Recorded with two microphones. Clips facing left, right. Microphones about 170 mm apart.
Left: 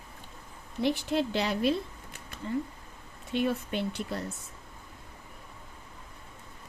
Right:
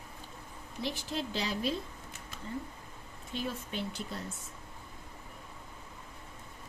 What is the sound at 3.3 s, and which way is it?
Speech, 65° left (ahead or behind).